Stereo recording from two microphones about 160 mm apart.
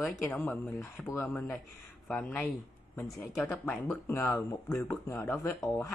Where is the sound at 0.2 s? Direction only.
10° left (ahead or behind).